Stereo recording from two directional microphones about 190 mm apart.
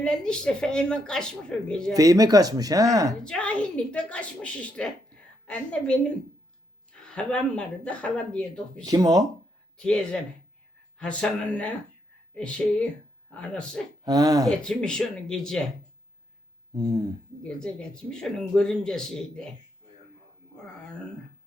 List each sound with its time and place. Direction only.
0.0 s speech: 5° left (ahead or behind)
1.9 s speech: 20° right (ahead or behind)
3.2 s speech: 5° left (ahead or behind)
6.9 s speech: 5° left (ahead or behind)
8.8 s speech: 20° right (ahead or behind)
9.7 s speech: 5° left (ahead or behind)
14.0 s speech: 20° right (ahead or behind)
14.4 s speech: 5° left (ahead or behind)
16.7 s speech: 20° right (ahead or behind)
17.4 s speech: 5° left (ahead or behind)